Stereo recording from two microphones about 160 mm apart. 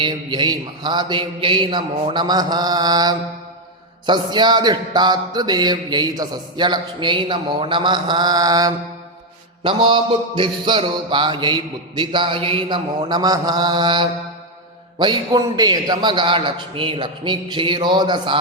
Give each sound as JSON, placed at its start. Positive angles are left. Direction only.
{"t": 0.0, "sound": "speech", "side_deg": -30}